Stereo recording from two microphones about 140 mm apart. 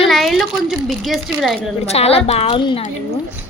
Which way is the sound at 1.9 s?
45° left (ahead or behind).